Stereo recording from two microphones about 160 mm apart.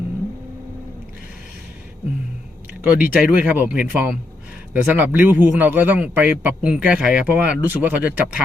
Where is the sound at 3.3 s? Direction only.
10° right (ahead or behind).